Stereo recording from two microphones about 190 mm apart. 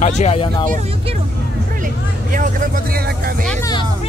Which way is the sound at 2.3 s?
45° right (ahead or behind).